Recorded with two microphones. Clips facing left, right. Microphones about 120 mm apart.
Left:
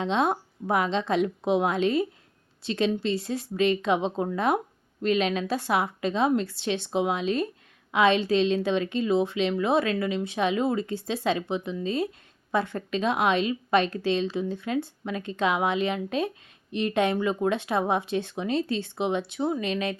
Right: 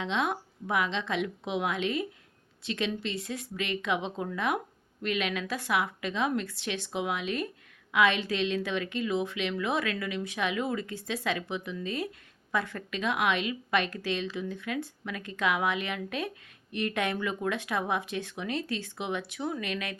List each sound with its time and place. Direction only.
0.0 s a woman's voice: 35° left (ahead or behind)